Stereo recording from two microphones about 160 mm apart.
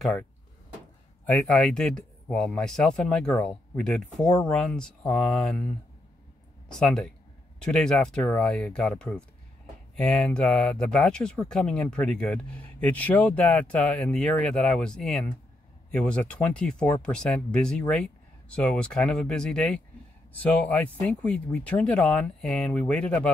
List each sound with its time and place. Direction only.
0.0 s speech: 5° left (ahead or behind)